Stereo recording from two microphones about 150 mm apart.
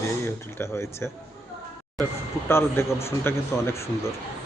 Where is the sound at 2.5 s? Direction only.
15° left (ahead or behind).